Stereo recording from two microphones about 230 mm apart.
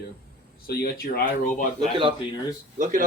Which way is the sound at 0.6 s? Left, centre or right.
Left.